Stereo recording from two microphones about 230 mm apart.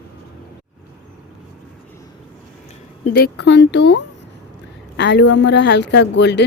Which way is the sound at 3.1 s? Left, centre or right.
Left.